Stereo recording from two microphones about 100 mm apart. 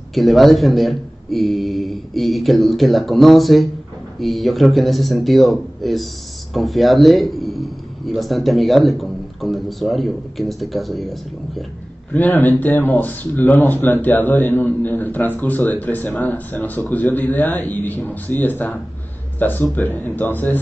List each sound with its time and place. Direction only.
0.1 s a man's voice: centre (ahead or behind)
12.1 s speech: 20° left (ahead or behind)